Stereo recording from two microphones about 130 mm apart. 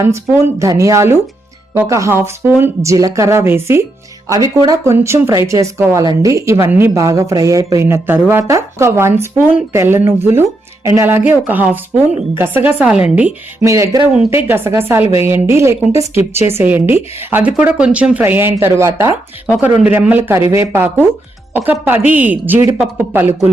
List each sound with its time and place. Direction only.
0.0 s a woman's voice: 20° right (ahead or behind)
13.7 s a woman's voice: 25° right (ahead or behind)